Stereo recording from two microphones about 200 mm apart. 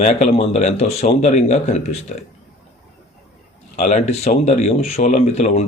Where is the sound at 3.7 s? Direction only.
35° left (ahead or behind).